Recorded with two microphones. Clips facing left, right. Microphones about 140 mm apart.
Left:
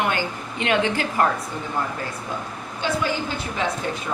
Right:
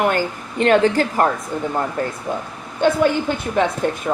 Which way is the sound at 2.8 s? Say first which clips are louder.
Right 8 dB; 55° right (ahead or behind).